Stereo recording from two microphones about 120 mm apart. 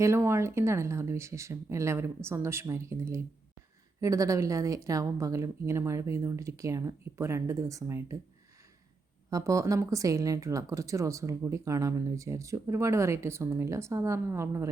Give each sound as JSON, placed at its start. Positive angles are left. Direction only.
{"t": 0.0, "sound": "speech", "side_deg": -25}
{"t": 9.3, "sound": "speech", "side_deg": -25}